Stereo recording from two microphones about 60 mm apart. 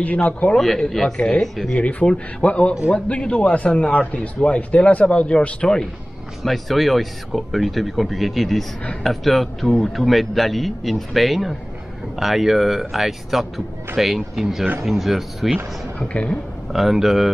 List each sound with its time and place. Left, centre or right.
0.0 s a man's voice: left
0.6 s a man's voice: centre
6.4 s a man's voice: centre
16.0 s speech: centre
16.7 s a man's voice: centre